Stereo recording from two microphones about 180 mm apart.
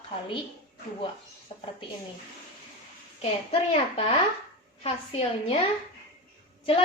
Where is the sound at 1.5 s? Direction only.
35° left (ahead or behind).